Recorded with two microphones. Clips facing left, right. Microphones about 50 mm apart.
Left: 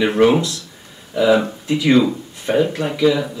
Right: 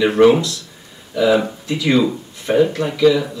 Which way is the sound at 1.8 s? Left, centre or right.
Centre.